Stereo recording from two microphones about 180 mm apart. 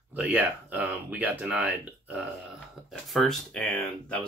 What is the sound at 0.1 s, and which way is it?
Speech, 10° right (ahead or behind).